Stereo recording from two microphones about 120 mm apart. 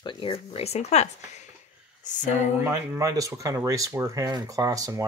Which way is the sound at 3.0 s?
30° right (ahead or behind).